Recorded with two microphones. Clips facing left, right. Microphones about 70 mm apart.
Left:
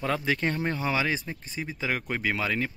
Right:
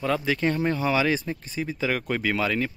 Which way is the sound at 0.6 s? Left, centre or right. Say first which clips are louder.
Right 4 dB; left.